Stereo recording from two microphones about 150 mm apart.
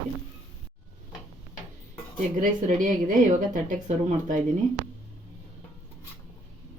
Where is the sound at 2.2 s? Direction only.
60° right (ahead or behind).